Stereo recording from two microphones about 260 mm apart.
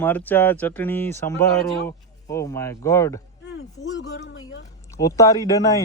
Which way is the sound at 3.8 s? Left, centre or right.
Left.